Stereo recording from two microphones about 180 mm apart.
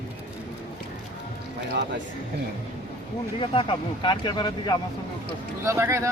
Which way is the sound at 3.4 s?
30° left (ahead or behind).